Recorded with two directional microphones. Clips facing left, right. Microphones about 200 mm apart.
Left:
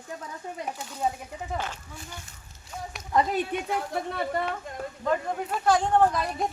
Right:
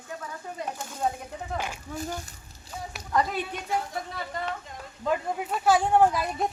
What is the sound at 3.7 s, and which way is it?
Speech, 60° left (ahead or behind).